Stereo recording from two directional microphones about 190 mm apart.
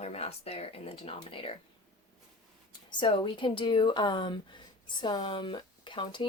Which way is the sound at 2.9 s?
25° left (ahead or behind).